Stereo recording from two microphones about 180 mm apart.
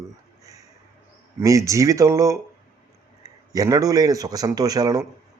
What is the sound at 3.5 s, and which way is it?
Speech, 20° right (ahead or behind).